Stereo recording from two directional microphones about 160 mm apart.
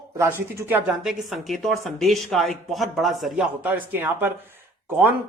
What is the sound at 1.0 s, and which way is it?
Speech, centre (ahead or behind).